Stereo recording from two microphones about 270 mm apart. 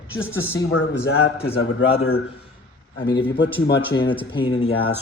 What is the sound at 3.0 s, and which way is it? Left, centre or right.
Speech, centre.